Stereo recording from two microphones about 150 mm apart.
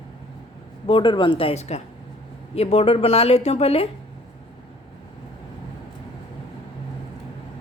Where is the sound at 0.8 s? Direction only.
35° left (ahead or behind).